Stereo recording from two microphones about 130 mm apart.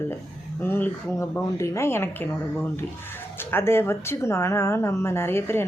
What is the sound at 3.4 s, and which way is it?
Speech, 15° left (ahead or behind).